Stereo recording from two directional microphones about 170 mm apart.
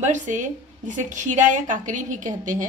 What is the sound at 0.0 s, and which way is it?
A woman's voice, 45° right (ahead or behind).